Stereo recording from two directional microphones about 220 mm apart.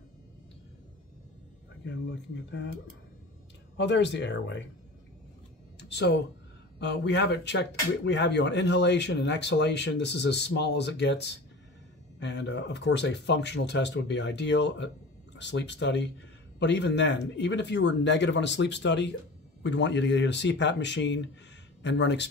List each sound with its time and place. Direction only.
1.9 s speech: 55° left (ahead or behind)
3.7 s speech: 55° left (ahead or behind)
5.8 s speech: 50° left (ahead or behind)